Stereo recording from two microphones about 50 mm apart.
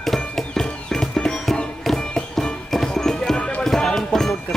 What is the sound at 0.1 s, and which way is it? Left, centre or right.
Music, centre.